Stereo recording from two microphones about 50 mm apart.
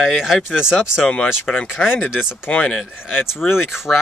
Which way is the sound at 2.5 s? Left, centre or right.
Left.